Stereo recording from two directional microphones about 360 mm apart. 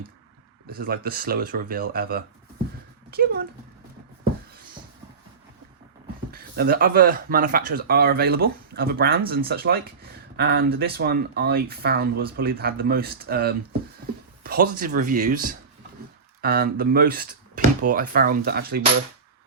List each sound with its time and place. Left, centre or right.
0.7 s speech: right
6.3 s speech: right